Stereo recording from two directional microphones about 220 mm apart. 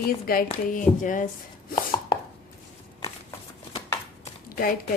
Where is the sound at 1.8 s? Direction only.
20° left (ahead or behind).